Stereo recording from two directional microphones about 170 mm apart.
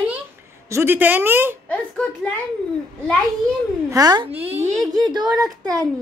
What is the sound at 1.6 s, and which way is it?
Speech, 10° left (ahead or behind).